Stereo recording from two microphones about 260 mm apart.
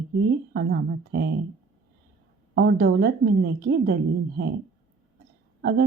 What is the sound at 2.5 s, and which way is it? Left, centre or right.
Speech, right.